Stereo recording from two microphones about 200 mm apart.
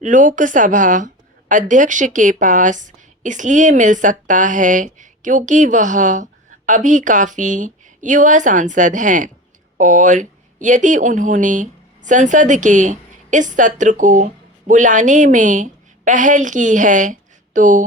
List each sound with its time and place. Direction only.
0.0 s a woman's voice: 40° right (ahead or behind)